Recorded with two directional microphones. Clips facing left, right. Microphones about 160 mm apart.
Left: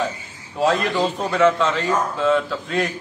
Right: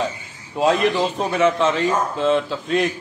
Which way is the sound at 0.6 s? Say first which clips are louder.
Right 2 dB; 20° right (ahead or behind).